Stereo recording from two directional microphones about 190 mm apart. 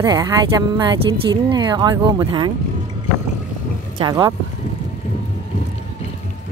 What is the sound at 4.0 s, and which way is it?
Speech, 20° right (ahead or behind).